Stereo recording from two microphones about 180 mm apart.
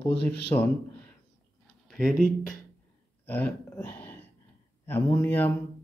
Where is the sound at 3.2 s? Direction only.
10° left (ahead or behind).